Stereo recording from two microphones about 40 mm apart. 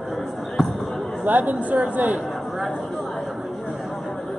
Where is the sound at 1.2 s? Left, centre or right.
Right.